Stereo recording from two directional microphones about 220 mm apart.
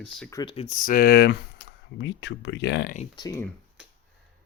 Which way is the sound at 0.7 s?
40° left (ahead or behind).